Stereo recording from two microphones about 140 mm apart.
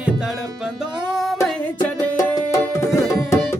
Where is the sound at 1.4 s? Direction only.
25° left (ahead or behind).